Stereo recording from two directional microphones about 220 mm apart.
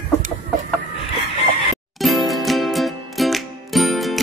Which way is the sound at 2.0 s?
Centre (ahead or behind).